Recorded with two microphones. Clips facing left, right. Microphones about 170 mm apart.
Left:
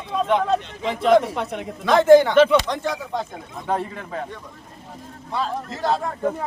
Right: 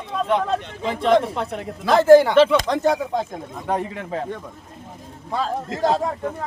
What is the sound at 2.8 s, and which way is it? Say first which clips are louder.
Speech: right 6 dB; 45° right (ahead or behind).